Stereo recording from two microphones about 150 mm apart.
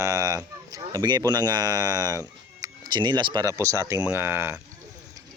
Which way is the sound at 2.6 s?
30° right (ahead or behind).